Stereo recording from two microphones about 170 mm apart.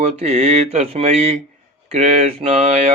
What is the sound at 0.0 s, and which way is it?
Speech, 40° right (ahead or behind).